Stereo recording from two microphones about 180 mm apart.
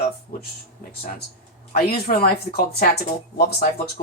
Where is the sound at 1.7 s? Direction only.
60° left (ahead or behind).